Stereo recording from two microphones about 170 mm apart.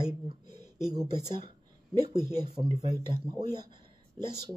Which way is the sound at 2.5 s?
35° right (ahead or behind).